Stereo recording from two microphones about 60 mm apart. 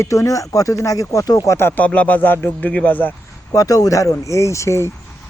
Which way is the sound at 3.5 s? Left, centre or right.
Left.